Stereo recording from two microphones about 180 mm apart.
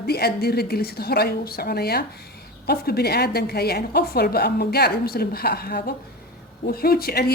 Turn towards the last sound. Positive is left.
turn(degrees=60)  # may be behind; listen again after turning